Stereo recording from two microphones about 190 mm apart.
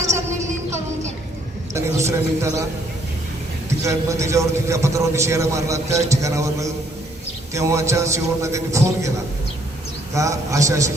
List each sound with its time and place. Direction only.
0.0 s music: 15° right (ahead or behind)
1.7 s a man's voice: 15° right (ahead or behind)
3.7 s a man's voice: 15° right (ahead or behind)
10.2 s a man's voice: 15° right (ahead or behind)